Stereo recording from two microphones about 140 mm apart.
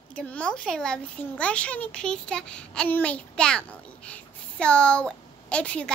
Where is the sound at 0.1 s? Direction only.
10° left (ahead or behind).